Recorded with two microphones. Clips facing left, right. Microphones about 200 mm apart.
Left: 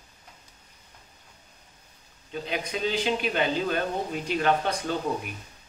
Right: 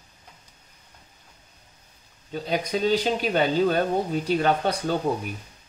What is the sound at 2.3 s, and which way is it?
Speech, 40° right (ahead or behind).